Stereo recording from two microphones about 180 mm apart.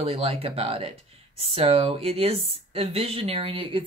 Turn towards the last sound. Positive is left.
turn(degrees=-30)  # may be behind; listen again after turning